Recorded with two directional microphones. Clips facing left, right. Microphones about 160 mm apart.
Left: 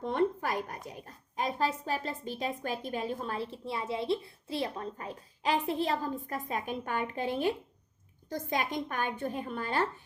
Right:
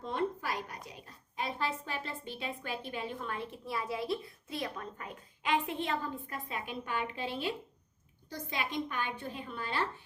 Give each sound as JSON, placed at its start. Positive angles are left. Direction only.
{"t": 0.0, "sound": "a woman's voice", "side_deg": 55}